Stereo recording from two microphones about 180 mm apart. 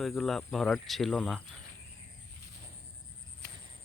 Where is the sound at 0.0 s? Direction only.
Centre (ahead or behind).